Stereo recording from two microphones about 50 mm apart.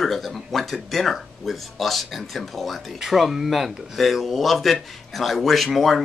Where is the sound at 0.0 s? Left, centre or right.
Centre.